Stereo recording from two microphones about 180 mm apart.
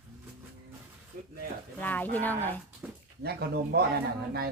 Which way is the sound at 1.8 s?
10° left (ahead or behind).